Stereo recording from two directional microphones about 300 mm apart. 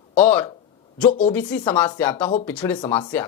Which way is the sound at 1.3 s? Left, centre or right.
Centre.